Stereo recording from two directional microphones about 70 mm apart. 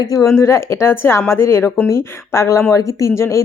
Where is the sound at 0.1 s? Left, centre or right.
Left.